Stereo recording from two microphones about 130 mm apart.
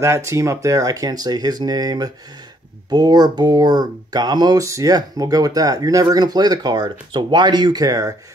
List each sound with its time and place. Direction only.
0.0 s speech: 20° right (ahead or behind)